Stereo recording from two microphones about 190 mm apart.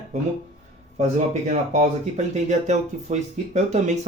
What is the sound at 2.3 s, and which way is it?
Speech, 35° right (ahead or behind).